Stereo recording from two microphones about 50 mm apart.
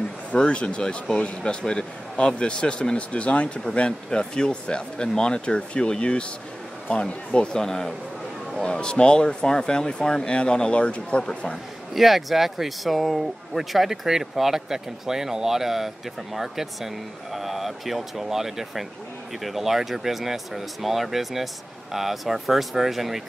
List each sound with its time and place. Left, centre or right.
0.3 s speech: left
11.9 s speech: centre